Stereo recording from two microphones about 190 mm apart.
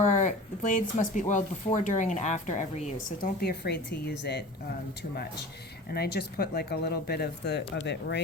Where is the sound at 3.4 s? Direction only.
55° left (ahead or behind).